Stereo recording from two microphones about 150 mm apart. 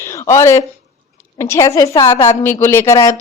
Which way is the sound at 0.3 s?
20° left (ahead or behind).